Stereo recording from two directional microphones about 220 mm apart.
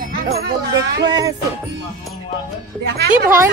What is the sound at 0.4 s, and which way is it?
Speech, 50° right (ahead or behind).